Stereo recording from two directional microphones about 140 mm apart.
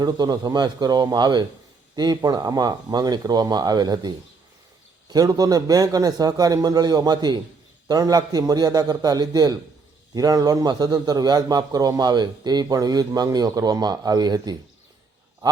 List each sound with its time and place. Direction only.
0.0 s a man's voice: 30° right (ahead or behind)
5.1 s a man's voice: 25° right (ahead or behind)